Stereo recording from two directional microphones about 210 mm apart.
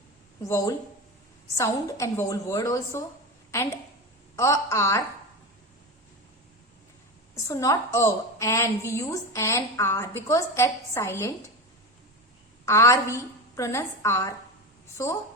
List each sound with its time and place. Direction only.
0.4 s a woman's voice: 15° left (ahead or behind)
4.4 s a woman's voice: 15° left (ahead or behind)
7.3 s a woman's voice: 15° left (ahead or behind)
12.6 s a woman's voice: 15° left (ahead or behind)